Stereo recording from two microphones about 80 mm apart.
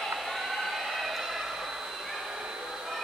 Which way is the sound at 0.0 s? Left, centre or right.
Centre.